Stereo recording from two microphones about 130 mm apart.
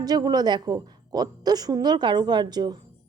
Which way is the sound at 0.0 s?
30° right (ahead or behind).